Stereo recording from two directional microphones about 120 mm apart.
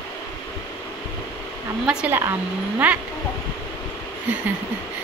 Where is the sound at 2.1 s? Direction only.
20° right (ahead or behind).